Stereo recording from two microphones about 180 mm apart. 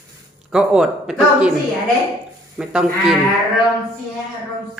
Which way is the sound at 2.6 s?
Centre (ahead or behind).